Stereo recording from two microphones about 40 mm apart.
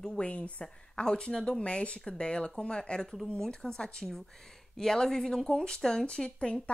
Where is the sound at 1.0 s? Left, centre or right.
Left.